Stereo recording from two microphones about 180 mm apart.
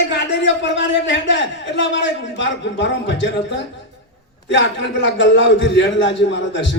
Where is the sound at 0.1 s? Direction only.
90° left.